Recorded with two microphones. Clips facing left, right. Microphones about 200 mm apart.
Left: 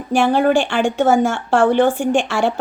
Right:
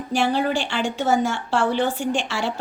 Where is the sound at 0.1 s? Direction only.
55° left (ahead or behind).